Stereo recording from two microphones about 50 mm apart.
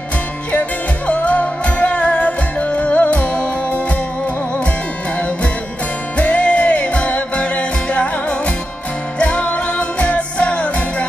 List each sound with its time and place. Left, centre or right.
0.5 s music: left
6.1 s music: left